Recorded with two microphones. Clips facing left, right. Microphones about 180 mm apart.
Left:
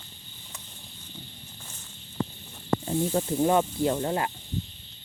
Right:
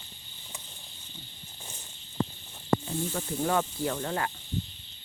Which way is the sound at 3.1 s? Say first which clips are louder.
Left 5 dB; 20° left (ahead or behind).